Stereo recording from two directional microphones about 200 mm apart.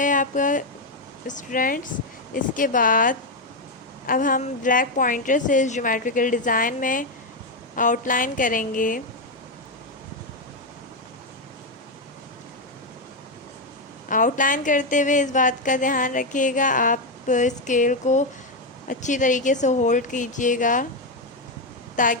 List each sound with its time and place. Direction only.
0.0 s a woman's voice: 40° left (ahead or behind)
14.1 s a woman's voice: 40° left (ahead or behind)
21.9 s a woman's voice: 40° left (ahead or behind)